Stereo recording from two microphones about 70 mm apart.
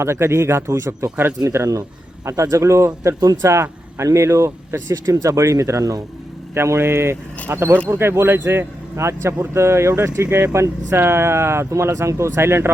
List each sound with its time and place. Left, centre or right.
0.0 s speech: right
6.5 s speech: right
10.2 s speech: right
10.5 s speech: right